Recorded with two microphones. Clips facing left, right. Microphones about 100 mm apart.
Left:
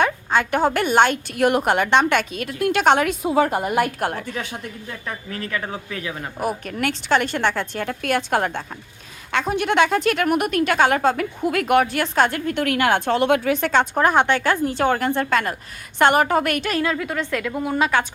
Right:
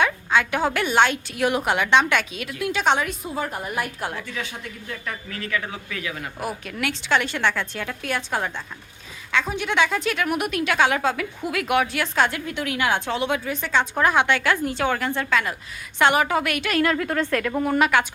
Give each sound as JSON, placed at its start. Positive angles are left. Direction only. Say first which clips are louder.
{"t": 0.0, "sound": "a woman's voice", "louder": "left 1 dB", "side_deg": 45}
{"t": 4.1, "sound": "a woman's voice", "louder": "left 3 dB", "side_deg": 45}
{"t": 5.3, "sound": "a woman's voice", "louder": "left 1 dB", "side_deg": 35}
{"t": 6.7, "sound": "a woman's voice", "louder": "left 1 dB", "side_deg": 45}
{"t": 14.0, "sound": "a woman's voice", "louder": "left 1 dB", "side_deg": 40}
{"t": 16.9, "sound": "a woman's voice", "louder": "right 1 dB", "side_deg": 15}